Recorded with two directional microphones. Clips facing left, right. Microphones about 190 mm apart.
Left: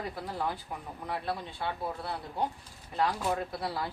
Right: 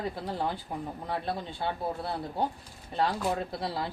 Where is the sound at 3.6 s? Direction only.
25° right (ahead or behind).